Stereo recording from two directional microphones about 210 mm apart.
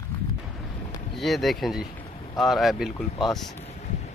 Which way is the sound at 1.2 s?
Centre (ahead or behind).